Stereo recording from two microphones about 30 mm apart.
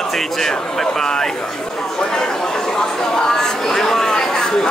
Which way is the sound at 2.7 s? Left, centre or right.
Centre.